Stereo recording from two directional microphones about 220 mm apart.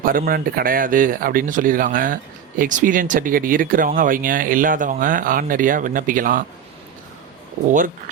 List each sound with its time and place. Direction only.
0.0 s speech: 40° right (ahead or behind)